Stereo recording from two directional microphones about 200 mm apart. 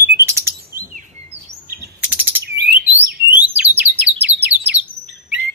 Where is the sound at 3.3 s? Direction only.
5° right (ahead or behind).